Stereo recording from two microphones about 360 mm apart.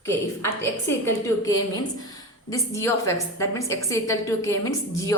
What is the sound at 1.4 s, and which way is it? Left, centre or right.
A woman's voice, centre.